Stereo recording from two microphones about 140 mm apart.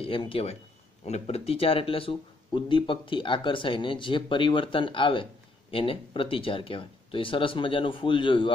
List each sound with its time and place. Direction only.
0.0 s speech: 40° left (ahead or behind)